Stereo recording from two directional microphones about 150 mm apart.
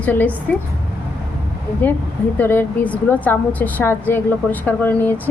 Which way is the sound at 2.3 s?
15° left (ahead or behind).